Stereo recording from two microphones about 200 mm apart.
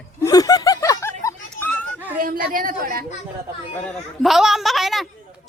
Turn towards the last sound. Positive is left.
turn(degrees=0)  # may be behind; listen again after turning